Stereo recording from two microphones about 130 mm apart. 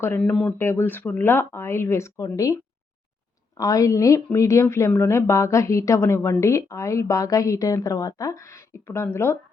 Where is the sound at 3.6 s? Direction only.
25° left (ahead or behind).